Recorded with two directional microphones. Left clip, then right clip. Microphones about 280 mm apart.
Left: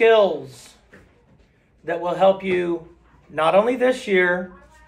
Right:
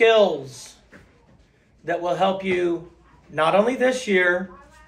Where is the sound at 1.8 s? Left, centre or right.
Centre.